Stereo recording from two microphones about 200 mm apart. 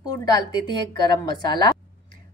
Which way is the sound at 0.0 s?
20° left (ahead or behind).